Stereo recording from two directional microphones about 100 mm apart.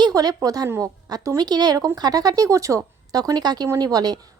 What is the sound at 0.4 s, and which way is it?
A woman's voice, 35° right (ahead or behind).